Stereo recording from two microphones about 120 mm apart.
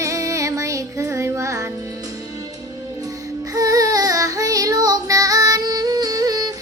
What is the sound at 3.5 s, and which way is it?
Child singing, 30° right (ahead or behind).